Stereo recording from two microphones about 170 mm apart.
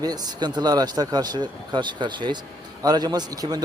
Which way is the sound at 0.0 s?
25° right (ahead or behind).